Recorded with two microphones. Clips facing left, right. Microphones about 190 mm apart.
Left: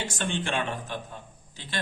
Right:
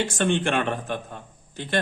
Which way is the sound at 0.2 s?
60° right (ahead or behind).